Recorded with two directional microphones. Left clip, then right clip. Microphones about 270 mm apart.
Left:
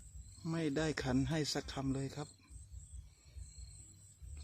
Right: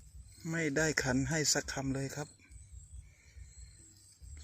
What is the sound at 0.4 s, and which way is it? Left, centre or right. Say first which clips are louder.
Speech: right 5 dB; centre.